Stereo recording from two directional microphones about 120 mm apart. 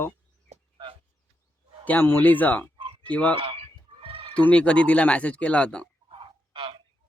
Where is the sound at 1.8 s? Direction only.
15° left (ahead or behind).